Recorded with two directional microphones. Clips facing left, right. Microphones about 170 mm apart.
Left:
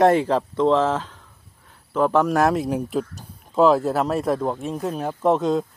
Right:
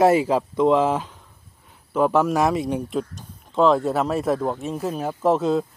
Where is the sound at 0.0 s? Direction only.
5° right (ahead or behind).